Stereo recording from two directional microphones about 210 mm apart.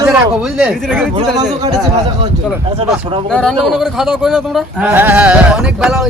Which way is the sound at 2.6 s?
25° right (ahead or behind).